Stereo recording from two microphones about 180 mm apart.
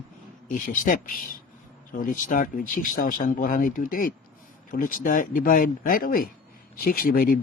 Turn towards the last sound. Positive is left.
turn(degrees=55)  # may be behind; listen again after turning